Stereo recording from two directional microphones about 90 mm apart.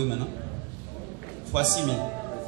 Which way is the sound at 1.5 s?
10° right (ahead or behind).